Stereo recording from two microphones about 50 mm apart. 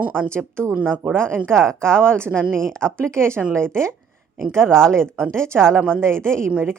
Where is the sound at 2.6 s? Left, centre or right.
Centre.